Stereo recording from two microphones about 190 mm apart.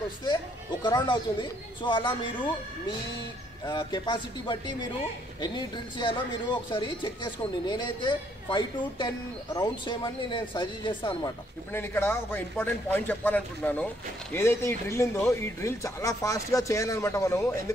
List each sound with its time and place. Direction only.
0.8 s speech: 25° left (ahead or behind)
3.6 s speech: 25° left (ahead or behind)
11.7 s speech: 10° left (ahead or behind)